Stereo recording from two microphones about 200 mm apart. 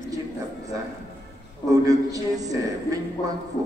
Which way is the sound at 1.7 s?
15° right (ahead or behind).